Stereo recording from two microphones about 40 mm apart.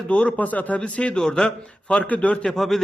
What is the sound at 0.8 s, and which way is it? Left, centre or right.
Speech, left.